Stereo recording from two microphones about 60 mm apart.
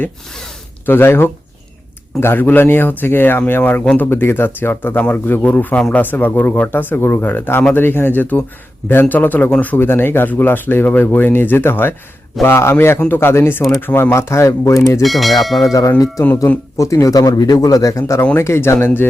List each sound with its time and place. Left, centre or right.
0.9 s speech: left
9.8 s speech: left
12.4 s speech: centre
13.1 s speech: left
15.0 s speech: centre
15.6 s a man's voice: left
18.3 s speech: left